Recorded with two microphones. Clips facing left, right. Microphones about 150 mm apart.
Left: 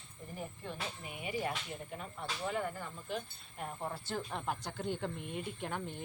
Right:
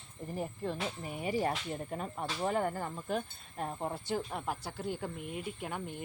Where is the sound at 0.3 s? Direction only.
40° right (ahead or behind).